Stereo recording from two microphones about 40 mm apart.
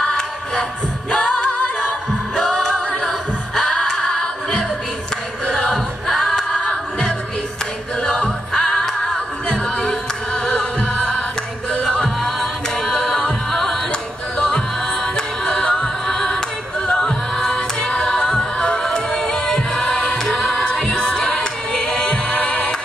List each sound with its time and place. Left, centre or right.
0.0 s music: centre
1.1 s singing: centre
2.3 s a capella: centre
3.1 s singing: centre
3.7 s a capella: centre
5.7 s a capella: centre
8.2 s a capella: centre
12.2 s carnatic music: centre
15.1 s music: centre
16.1 s choir: centre
17.0 s music: centre